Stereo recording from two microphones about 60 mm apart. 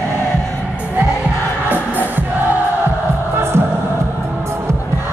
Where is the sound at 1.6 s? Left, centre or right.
Right.